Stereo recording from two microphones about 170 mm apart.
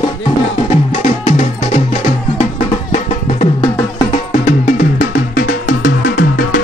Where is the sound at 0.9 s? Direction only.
40° left (ahead or behind).